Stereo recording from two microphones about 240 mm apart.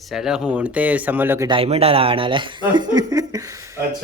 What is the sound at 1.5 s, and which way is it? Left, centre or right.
Speech, right.